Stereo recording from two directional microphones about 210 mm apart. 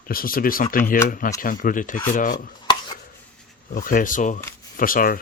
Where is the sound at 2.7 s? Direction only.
20° left (ahead or behind).